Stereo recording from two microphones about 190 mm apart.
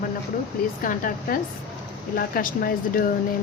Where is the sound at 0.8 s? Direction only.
50° left (ahead or behind).